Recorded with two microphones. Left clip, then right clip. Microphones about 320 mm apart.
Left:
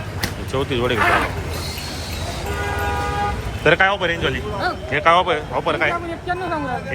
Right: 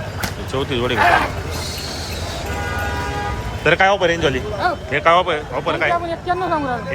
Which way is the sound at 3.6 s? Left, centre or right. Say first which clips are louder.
Right 2 dB; centre.